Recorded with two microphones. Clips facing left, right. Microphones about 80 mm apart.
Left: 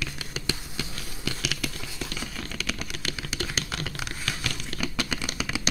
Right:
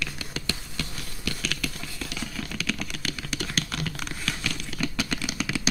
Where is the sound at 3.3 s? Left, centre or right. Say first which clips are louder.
Right 2 dB; centre.